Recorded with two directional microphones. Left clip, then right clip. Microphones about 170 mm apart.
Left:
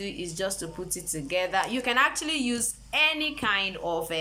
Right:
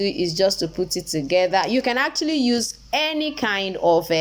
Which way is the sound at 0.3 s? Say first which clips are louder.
Right 11 dB; 25° right (ahead or behind).